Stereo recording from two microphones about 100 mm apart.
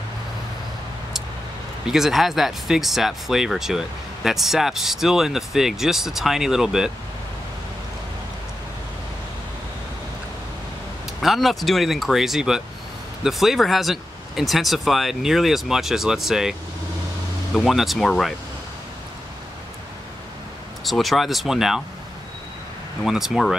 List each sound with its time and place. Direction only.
1.9 s speech: 5° right (ahead or behind)
11.1 s speech: centre (ahead or behind)
17.6 s speech: centre (ahead or behind)
20.8 s speech: centre (ahead or behind)
23.0 s speech: 5° right (ahead or behind)